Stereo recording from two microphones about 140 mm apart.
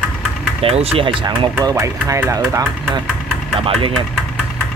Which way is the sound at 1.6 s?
25° right (ahead or behind).